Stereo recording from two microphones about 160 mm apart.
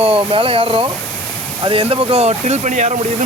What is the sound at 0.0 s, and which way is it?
Speech, 35° right (ahead or behind).